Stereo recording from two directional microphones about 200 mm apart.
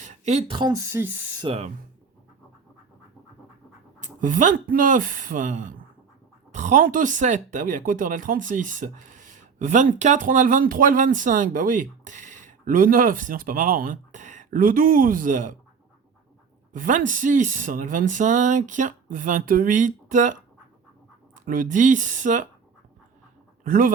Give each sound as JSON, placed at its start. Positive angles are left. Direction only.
{"t": 0.0, "sound": "speech", "side_deg": -35}
{"t": 1.5, "sound": "speech", "side_deg": -30}
{"t": 4.0, "sound": "speech", "side_deg": -40}
{"t": 16.7, "sound": "speech", "side_deg": -40}
{"t": 21.4, "sound": "speech", "side_deg": -45}
{"t": 23.6, "sound": "speech", "side_deg": -45}